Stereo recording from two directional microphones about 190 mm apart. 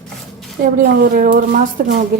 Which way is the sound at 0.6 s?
50° right (ahead or behind).